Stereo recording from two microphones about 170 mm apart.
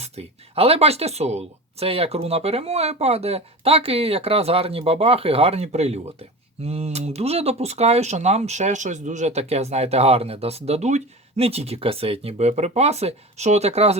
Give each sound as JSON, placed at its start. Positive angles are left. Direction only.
{"t": 0.0, "sound": "speech", "side_deg": -35}